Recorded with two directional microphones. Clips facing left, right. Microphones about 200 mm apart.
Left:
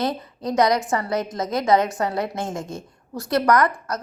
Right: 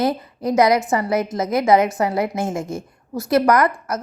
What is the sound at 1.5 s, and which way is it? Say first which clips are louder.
Speech: right 3 dB; 10° right (ahead or behind).